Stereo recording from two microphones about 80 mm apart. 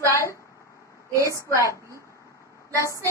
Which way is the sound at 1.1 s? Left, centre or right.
Right.